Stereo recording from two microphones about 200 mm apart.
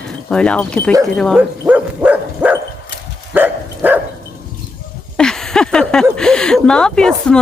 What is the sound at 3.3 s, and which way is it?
Dog, 10° right (ahead or behind).